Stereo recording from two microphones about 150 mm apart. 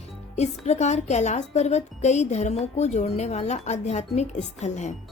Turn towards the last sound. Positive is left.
turn(degrees=50)  # may be behind; listen again after turning